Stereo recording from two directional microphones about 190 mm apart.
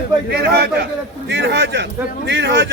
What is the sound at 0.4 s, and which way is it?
A man's voice, 60° right (ahead or behind).